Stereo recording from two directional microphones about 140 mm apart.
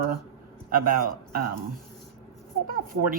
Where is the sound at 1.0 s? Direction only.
90° right.